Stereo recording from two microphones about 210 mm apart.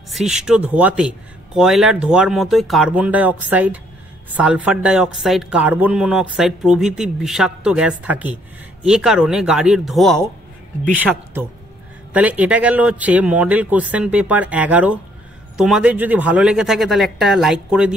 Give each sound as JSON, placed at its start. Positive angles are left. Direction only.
{"t": 0.1, "sound": "speech", "side_deg": 0}